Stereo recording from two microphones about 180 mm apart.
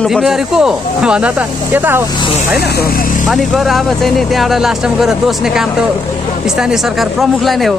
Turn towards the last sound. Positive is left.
turn(degrees=0)  # may be behind; listen again after turning